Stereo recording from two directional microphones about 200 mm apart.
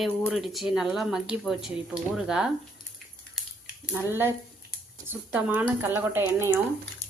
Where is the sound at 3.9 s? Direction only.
10° right (ahead or behind).